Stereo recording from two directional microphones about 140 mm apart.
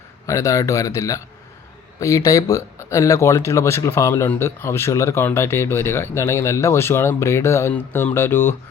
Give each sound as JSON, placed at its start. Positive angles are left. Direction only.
{"t": 0.3, "sound": "speech", "side_deg": 25}